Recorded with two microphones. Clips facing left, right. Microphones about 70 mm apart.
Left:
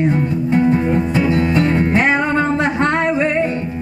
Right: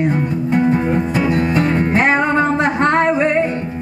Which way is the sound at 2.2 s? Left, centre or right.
Right.